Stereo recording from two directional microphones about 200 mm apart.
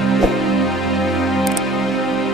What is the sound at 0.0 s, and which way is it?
Music, centre (ahead or behind).